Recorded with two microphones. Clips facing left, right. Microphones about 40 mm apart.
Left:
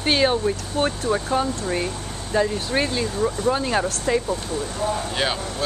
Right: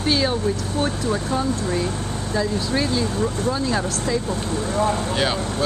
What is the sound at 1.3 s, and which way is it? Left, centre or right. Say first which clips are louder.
Speech: even; left.